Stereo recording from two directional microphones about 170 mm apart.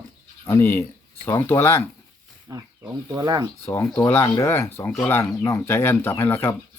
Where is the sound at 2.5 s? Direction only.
20° right (ahead or behind).